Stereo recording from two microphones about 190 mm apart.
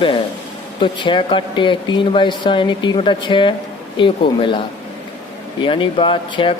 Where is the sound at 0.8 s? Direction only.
25° left (ahead or behind).